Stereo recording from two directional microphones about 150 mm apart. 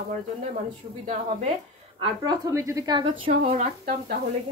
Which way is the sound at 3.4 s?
55° right (ahead or behind).